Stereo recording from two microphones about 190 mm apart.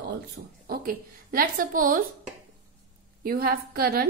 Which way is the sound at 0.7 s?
50° right (ahead or behind).